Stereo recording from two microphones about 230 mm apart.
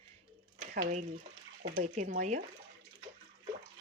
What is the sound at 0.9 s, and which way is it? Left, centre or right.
Speech, right.